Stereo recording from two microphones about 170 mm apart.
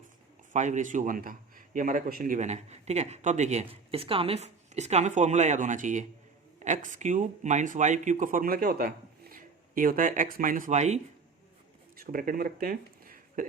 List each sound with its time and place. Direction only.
0.5 s a man's voice: 45° right (ahead or behind)
11.9 s speech: 55° right (ahead or behind)